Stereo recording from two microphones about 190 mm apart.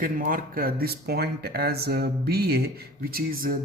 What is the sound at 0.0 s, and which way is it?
Speech, 50° right (ahead or behind).